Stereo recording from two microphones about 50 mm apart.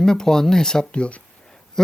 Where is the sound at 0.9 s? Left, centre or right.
Left.